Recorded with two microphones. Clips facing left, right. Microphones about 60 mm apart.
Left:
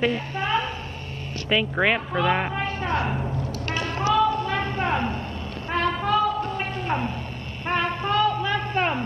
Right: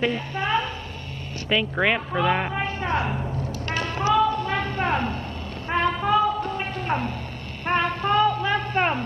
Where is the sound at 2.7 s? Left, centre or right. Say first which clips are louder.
Even; right.